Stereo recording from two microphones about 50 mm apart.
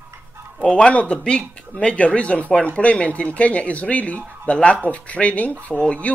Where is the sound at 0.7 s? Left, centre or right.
Left.